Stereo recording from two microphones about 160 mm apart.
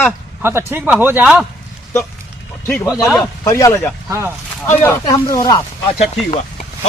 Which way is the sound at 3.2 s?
20° left (ahead or behind).